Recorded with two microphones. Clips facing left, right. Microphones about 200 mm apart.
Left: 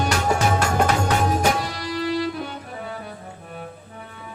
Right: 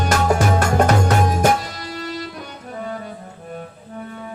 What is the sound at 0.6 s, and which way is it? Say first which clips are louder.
Music: right 4 dB; 45° right (ahead or behind).